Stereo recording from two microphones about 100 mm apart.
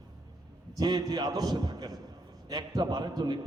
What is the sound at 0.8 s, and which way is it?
A man's voice, 45° right (ahead or behind).